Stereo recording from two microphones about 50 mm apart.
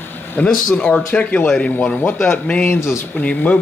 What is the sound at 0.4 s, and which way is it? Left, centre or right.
Speech, centre.